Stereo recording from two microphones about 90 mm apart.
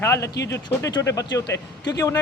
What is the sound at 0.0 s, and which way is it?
Speech, 30° left (ahead or behind).